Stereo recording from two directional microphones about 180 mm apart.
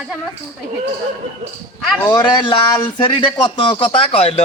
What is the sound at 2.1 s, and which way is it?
Speech, 25° left (ahead or behind).